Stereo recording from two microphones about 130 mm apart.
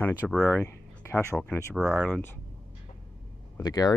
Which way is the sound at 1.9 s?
10° left (ahead or behind).